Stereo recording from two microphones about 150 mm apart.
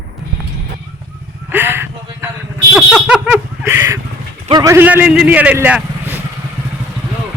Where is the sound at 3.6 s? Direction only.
20° right (ahead or behind).